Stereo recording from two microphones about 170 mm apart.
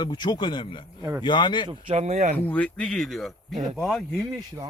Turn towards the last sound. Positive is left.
turn(degrees=0)  # may be behind; listen again after turning